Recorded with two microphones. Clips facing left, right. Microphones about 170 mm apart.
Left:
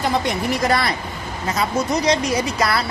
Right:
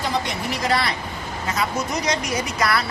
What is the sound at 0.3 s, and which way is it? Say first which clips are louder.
Speech: left 4 dB; 50° left (ahead or behind).